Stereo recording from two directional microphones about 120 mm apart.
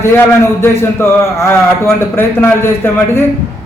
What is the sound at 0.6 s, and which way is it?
A man's voice, 20° left (ahead or behind).